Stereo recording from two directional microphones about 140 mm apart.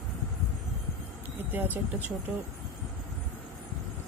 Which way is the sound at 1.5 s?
15° right (ahead or behind).